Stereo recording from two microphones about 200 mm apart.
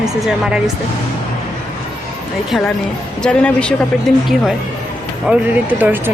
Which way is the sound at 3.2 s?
5° left (ahead or behind).